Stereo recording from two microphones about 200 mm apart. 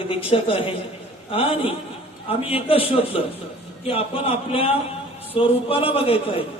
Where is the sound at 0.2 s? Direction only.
25° left (ahead or behind).